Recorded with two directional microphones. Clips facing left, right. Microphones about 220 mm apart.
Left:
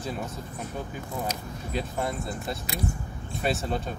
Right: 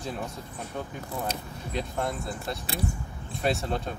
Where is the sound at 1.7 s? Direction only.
Centre (ahead or behind).